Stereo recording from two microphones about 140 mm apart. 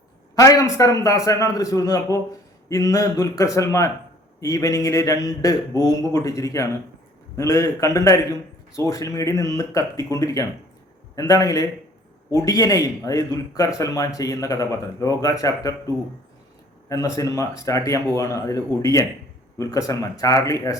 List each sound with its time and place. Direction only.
0.3 s speech: 25° left (ahead or behind)
17.2 s speech: 25° left (ahead or behind)